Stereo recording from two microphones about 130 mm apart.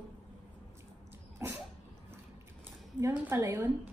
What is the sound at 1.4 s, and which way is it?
Cough, 25° right (ahead or behind).